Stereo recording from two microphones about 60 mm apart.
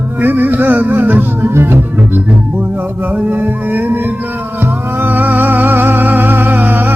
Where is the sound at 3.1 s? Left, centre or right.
Right.